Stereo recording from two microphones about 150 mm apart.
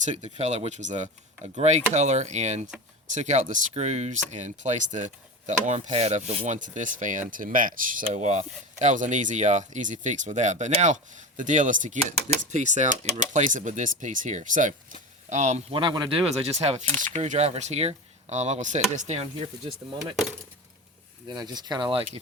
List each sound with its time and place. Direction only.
0.0 s speech: 50° right (ahead or behind)
15.7 s speech: 30° right (ahead or behind)
21.2 s speech: 30° right (ahead or behind)